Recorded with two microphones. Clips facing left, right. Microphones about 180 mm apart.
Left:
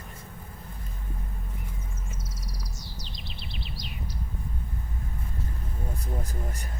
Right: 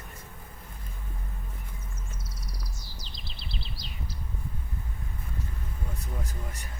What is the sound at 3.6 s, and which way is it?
Bird, 30° right (ahead or behind).